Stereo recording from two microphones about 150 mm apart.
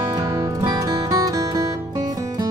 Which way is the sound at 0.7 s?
25° right (ahead or behind).